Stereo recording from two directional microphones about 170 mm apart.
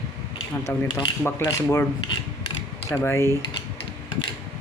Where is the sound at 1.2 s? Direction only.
15° left (ahead or behind).